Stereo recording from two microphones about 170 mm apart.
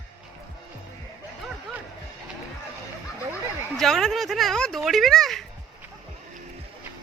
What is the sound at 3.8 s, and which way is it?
Speech, centre (ahead or behind).